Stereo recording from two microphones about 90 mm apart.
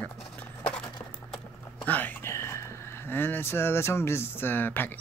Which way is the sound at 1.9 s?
20° left (ahead or behind).